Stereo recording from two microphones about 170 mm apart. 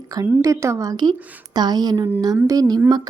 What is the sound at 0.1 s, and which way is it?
Speech, 20° right (ahead or behind).